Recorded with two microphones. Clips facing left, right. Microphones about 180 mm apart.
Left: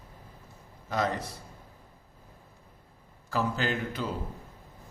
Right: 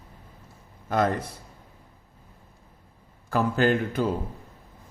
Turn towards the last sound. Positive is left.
turn(degrees=-50)  # may be behind; listen again after turning